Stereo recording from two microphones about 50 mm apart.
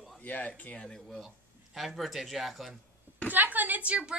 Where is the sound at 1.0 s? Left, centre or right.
Centre.